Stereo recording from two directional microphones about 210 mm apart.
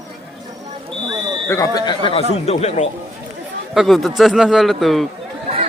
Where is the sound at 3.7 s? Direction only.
Centre (ahead or behind).